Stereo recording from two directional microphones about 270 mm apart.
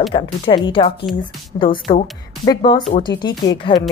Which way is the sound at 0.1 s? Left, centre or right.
Left.